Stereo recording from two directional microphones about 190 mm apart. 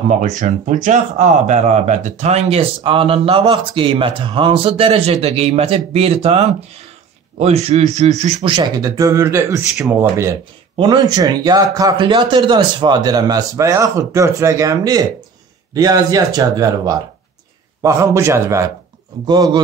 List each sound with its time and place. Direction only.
0.1 s a man's voice: 40° right (ahead or behind); by 19.6 s 20° right (ahead or behind)